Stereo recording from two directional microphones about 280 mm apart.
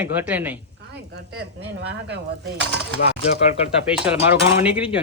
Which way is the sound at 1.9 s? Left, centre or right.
Right.